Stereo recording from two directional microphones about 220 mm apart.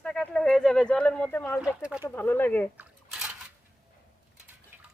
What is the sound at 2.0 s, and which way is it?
Speech, 10° left (ahead or behind).